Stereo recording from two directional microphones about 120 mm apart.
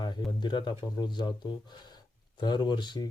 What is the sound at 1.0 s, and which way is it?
Speech, 35° left (ahead or behind).